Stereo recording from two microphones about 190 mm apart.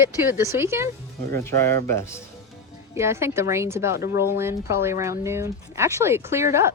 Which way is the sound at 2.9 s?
15° right (ahead or behind).